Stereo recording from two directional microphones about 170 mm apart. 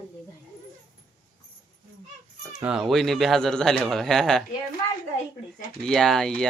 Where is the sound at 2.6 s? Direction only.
5° right (ahead or behind).